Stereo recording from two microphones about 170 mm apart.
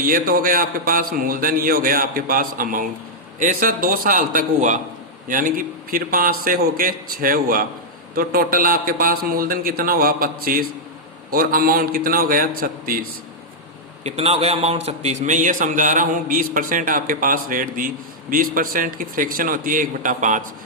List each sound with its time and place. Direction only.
0.0 s a man's voice: 55° right (ahead or behind)
14.0 s a man's voice: 35° right (ahead or behind)